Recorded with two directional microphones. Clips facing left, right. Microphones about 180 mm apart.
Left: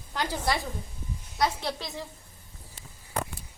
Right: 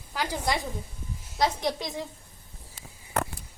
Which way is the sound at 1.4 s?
15° right (ahead or behind).